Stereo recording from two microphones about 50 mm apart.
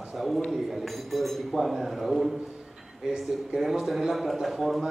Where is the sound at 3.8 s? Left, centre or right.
Centre.